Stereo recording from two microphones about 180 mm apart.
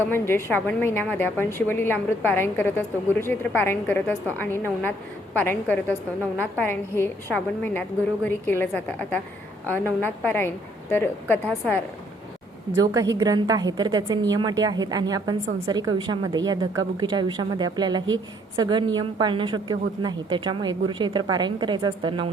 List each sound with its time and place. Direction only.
0.0 s a woman's voice: 10° left (ahead or behind)
12.8 s a woman's voice: 20° right (ahead or behind)